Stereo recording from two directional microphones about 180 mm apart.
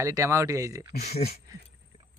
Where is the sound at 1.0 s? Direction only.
40° left (ahead or behind).